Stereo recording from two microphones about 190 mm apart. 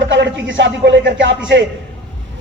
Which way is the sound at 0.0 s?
70° right (ahead or behind).